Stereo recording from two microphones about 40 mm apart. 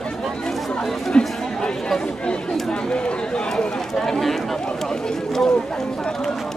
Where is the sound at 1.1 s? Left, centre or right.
Left.